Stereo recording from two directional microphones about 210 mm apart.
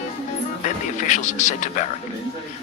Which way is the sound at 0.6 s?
35° left (ahead or behind).